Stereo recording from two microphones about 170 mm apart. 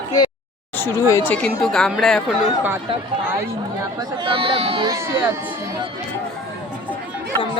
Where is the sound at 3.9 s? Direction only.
25° right (ahead or behind).